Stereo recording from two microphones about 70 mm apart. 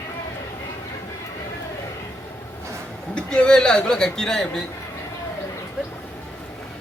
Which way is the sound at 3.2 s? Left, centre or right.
Centre.